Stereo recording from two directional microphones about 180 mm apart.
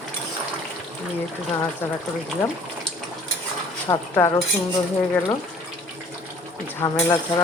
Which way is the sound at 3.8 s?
15° left (ahead or behind).